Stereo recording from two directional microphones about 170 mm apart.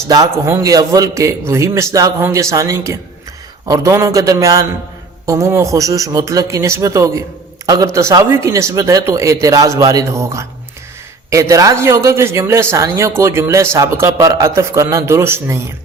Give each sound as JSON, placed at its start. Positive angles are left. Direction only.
{"t": 0.1, "sound": "a man's voice", "side_deg": -15}